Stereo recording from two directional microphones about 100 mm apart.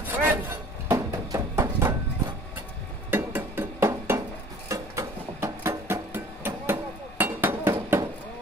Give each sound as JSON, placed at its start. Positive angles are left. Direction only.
{"t": 0.0, "sound": "wood", "side_deg": -20}
{"t": 0.9, "sound": "music", "side_deg": -35}
{"t": 3.1, "sound": "music", "side_deg": -20}